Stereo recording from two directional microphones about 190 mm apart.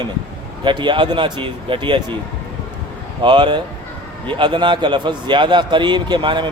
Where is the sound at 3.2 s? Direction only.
25° right (ahead or behind).